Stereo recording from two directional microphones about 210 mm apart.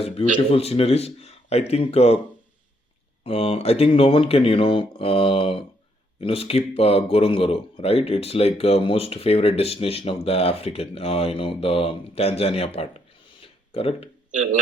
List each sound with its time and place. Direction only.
0.3 s speech: 30° left (ahead or behind)
3.2 s speech: 25° left (ahead or behind)
13.4 s a sound: 25° left (ahead or behind)
14.3 s speech: 35° right (ahead or behind)